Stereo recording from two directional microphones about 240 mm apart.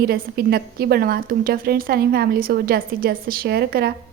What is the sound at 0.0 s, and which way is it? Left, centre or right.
A woman's voice, right.